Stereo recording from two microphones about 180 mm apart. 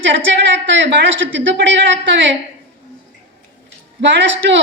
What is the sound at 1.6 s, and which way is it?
Speech, 90° right.